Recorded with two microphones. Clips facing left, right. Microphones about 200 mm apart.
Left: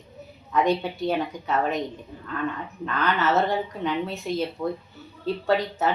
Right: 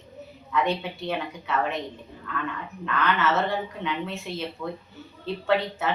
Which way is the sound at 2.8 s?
40° left (ahead or behind).